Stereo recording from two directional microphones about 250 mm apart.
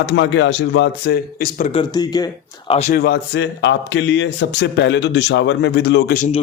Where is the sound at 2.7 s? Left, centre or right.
Left.